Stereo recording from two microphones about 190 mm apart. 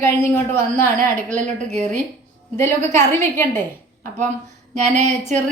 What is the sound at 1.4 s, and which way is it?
Speech, 40° right (ahead or behind).